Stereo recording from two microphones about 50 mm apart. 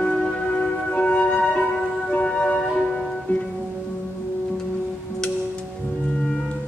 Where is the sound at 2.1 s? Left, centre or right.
Left.